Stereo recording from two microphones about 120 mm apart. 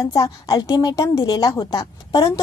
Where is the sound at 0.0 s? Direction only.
30° left (ahead or behind).